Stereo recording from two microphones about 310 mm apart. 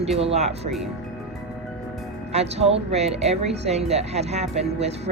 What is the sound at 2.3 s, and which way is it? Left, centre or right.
Speech, centre.